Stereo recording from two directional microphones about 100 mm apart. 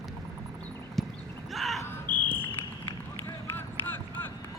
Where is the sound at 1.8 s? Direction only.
20° left (ahead or behind).